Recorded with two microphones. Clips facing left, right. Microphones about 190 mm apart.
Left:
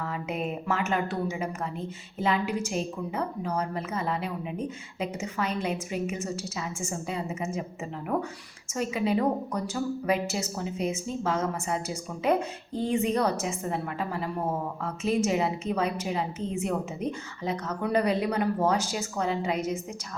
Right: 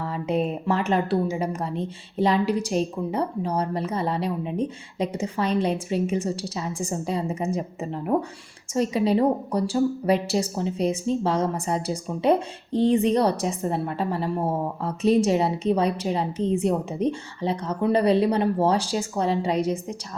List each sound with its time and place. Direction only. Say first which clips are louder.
0.0 s a woman's voice: right 6 dB; 35° right (ahead or behind)